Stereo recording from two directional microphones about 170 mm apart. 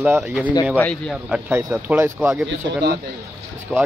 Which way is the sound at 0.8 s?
5° left (ahead or behind).